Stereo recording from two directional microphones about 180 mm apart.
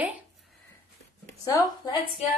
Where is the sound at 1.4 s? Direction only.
20° left (ahead or behind).